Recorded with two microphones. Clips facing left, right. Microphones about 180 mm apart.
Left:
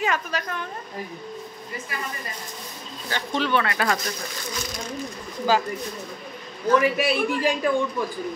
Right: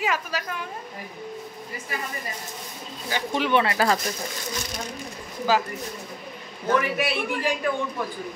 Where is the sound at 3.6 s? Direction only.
30° right (ahead or behind).